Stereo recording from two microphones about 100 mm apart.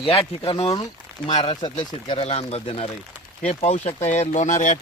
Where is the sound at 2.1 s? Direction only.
80° left.